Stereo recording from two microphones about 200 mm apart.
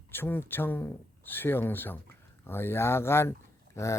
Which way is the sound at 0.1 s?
10° left (ahead or behind).